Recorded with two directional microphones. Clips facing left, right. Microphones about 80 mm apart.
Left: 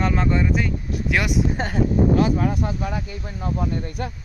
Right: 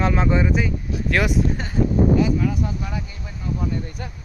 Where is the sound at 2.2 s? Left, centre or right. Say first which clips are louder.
Even; left.